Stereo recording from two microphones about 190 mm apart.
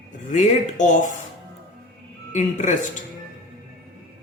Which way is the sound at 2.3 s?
40° left (ahead or behind).